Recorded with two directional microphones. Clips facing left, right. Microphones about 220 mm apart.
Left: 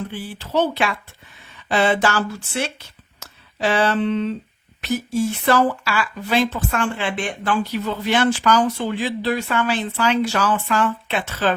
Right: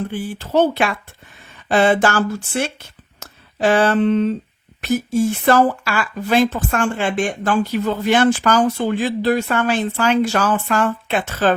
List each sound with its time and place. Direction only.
0.1 s speech: 50° right (ahead or behind)